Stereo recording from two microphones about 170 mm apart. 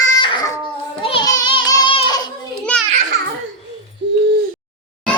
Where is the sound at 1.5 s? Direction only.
25° left (ahead or behind).